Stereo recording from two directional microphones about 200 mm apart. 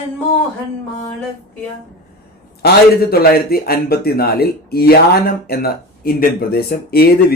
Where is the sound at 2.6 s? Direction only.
50° left (ahead or behind).